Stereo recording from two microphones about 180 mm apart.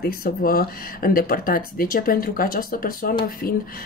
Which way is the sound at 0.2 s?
55° left (ahead or behind).